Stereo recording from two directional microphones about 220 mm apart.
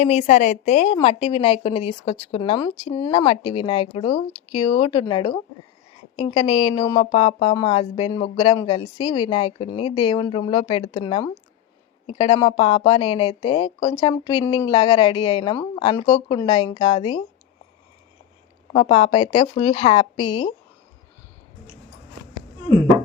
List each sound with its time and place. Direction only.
0.0 s a woman's voice: 30° left (ahead or behind)
18.7 s speech: 25° left (ahead or behind)